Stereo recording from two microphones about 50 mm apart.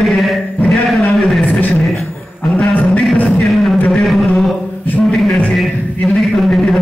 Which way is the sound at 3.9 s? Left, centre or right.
Centre.